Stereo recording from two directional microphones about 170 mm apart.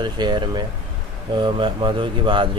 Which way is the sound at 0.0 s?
25° right (ahead or behind).